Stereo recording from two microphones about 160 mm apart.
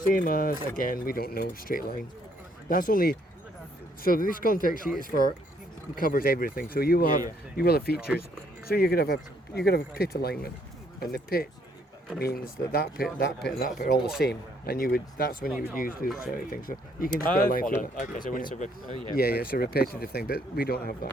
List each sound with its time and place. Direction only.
0.1 s speech: 60° left (ahead or behind)
7.9 s speech: 10° right (ahead or behind)
8.6 s speech: 75° left (ahead or behind)
13.2 s a man's voice: 90° left
13.7 s speech: 55° left (ahead or behind)
14.3 s speech: 70° left (ahead or behind); by 18.9 s 50° left (ahead or behind)
19.1 s speech: 70° left (ahead or behind)